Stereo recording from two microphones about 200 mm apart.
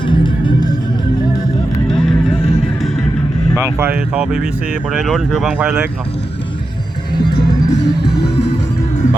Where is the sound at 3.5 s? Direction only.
10° right (ahead or behind).